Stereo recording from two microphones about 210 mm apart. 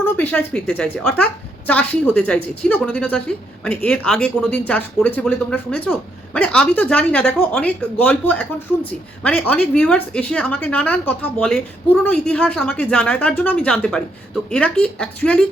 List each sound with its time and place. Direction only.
0.0 s speech: 10° left (ahead or behind)